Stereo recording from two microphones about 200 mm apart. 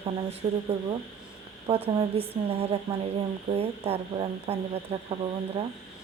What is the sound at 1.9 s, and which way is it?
Speech, 25° right (ahead or behind).